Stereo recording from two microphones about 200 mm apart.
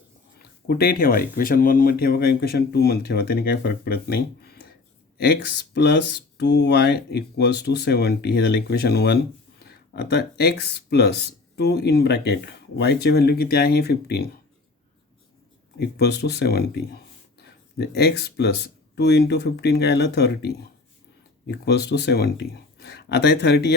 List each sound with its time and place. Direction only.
0.7 s speech: 50° left (ahead or behind)
15.8 s speech: 55° left (ahead or behind)